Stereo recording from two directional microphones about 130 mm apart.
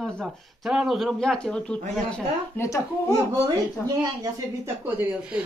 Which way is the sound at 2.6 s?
25° left (ahead or behind).